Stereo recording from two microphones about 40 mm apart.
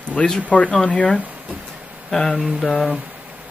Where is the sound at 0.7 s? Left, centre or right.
Left.